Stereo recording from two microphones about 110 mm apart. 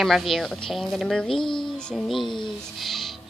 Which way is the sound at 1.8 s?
5° left (ahead or behind).